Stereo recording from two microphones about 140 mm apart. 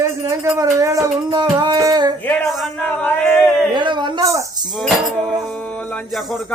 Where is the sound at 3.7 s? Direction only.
35° right (ahead or behind).